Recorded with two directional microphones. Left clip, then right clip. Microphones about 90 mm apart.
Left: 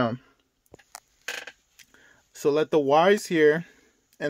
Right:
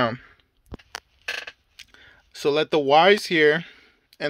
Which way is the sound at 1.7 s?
25° left (ahead or behind).